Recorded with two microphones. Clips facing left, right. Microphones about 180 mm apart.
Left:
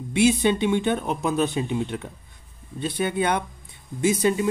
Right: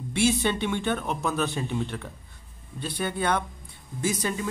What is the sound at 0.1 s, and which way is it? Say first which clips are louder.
Speech: left 5 dB; 15° left (ahead or behind).